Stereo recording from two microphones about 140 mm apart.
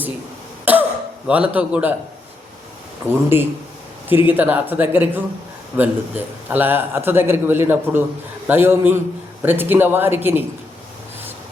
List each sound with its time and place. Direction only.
0.6 s cough: 10° right (ahead or behind)
1.3 s a man's voice: 10° right (ahead or behind)
3.1 s a man's voice: 15° right (ahead or behind)